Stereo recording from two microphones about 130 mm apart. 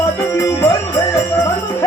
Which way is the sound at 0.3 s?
25° left (ahead or behind).